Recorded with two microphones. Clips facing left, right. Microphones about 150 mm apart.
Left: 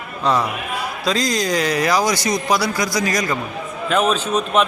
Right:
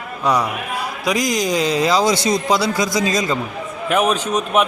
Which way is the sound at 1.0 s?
15° right (ahead or behind).